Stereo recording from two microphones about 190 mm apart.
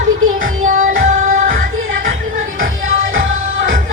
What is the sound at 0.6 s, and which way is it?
Music, 45° right (ahead or behind).